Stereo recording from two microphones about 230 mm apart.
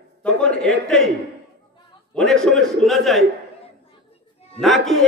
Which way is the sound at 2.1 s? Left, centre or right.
Centre.